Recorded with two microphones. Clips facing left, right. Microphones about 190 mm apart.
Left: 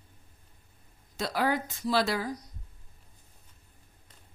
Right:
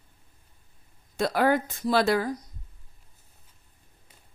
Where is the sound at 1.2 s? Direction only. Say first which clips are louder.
Right 6 dB; 55° right (ahead or behind).